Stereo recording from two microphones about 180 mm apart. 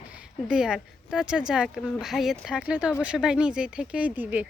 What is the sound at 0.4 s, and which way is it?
Speech, 5° right (ahead or behind).